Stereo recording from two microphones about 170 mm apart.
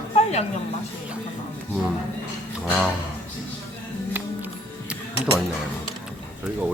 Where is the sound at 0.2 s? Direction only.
40° left (ahead or behind).